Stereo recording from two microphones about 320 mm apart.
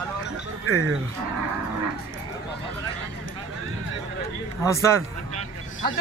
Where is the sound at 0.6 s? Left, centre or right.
Right.